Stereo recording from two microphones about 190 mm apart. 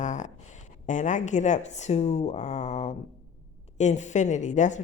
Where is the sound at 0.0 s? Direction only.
40° left (ahead or behind).